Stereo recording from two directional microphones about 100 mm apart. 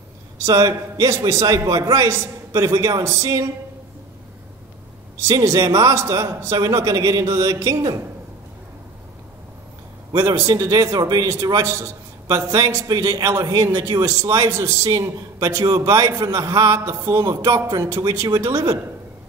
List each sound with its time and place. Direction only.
0.4 s a man's voice: 30° right (ahead or behind)
5.2 s a man's voice: 30° right (ahead or behind)
10.1 s a man's voice: 30° right (ahead or behind)